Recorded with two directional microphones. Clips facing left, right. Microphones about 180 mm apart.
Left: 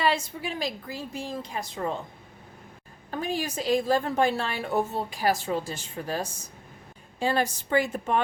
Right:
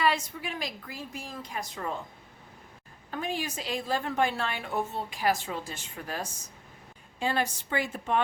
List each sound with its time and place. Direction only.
0.0 s a woman's voice: 30° left (ahead or behind)
3.1 s a woman's voice: 35° left (ahead or behind)